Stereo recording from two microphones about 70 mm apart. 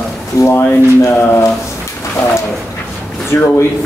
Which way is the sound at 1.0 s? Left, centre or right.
Left.